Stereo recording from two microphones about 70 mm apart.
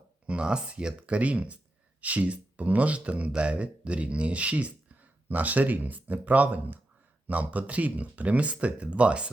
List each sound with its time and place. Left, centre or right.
0.3 s speech: centre